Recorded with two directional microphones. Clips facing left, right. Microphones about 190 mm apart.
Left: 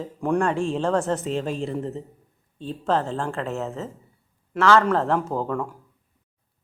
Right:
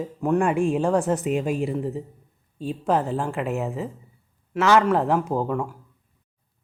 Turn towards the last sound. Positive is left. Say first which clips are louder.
# right 2 dB
turn(degrees=-10)  # may be behind; listen again after turning